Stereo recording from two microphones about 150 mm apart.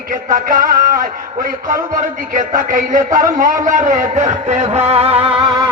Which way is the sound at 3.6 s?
55° right (ahead or behind).